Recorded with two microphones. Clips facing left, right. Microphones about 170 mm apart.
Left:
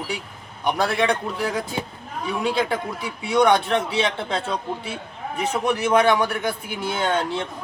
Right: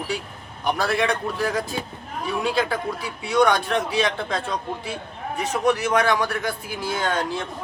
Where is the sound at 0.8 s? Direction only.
20° left (ahead or behind).